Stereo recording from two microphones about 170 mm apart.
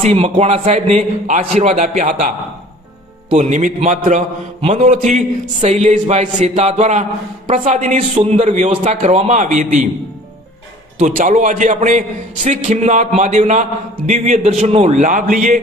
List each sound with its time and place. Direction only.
0.0 s a man's voice: 40° right (ahead or behind)
8.1 s a man's voice: 35° right (ahead or behind)
11.0 s a man's voice: 50° right (ahead or behind)